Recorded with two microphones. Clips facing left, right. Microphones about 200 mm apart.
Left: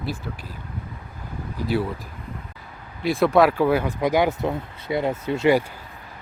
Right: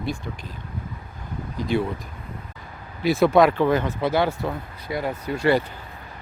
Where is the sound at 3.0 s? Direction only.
Centre (ahead or behind); by 5.5 s 25° left (ahead or behind).